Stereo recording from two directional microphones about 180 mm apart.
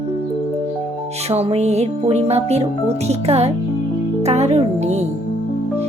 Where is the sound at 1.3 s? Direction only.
35° right (ahead or behind).